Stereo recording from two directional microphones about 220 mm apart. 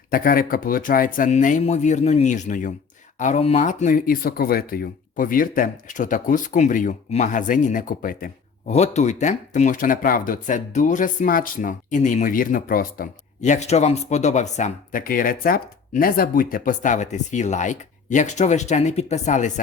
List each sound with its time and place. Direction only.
0.1 s speech: 40° left (ahead or behind)